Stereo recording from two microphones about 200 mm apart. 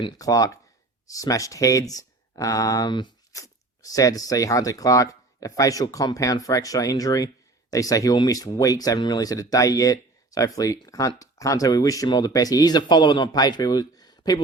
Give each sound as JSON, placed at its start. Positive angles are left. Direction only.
{"t": 0.0, "sound": "speech", "side_deg": 15}